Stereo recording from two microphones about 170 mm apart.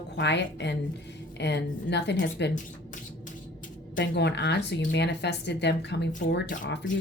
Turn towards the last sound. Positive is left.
turn(degrees=90)